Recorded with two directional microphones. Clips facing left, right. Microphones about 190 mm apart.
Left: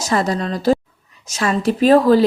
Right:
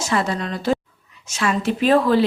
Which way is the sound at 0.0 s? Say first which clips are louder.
Left 3 dB; 40° left (ahead or behind).